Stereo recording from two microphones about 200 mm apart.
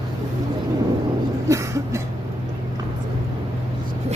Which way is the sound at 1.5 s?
15° right (ahead or behind).